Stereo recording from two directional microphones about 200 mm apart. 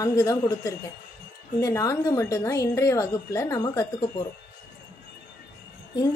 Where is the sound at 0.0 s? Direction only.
15° left (ahead or behind).